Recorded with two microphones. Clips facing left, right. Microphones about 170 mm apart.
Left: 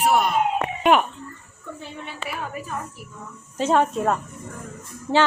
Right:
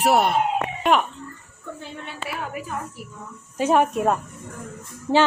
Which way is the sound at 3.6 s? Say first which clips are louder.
Right 1 dB; 15° right (ahead or behind).